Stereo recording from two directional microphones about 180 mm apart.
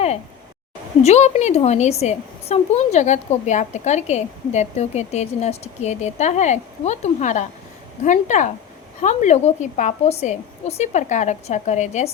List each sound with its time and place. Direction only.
1.0 s a woman's voice: 40° left (ahead or behind)